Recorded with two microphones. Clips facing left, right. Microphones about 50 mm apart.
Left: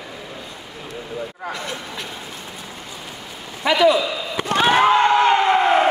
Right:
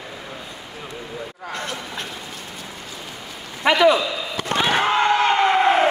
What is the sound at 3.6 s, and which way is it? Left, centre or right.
Speech, right.